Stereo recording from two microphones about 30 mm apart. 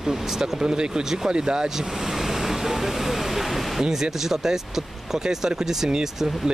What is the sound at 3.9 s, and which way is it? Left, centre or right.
Speech, centre.